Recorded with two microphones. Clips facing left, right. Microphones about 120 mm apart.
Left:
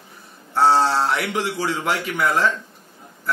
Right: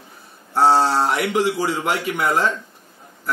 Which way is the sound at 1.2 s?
15° right (ahead or behind).